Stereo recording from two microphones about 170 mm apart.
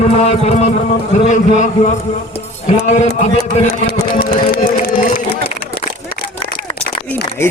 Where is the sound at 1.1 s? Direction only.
45° left (ahead or behind).